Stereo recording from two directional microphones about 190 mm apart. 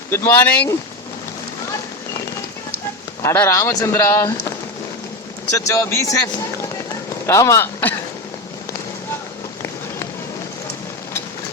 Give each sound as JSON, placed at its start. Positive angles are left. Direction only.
{"t": 0.1, "sound": "a man's voice", "side_deg": 10}
{"t": 3.2, "sound": "a man's voice", "side_deg": 15}
{"t": 5.5, "sound": "a man's voice", "side_deg": 15}